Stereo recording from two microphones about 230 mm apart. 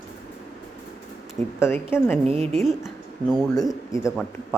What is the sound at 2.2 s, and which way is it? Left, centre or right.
Speech, right.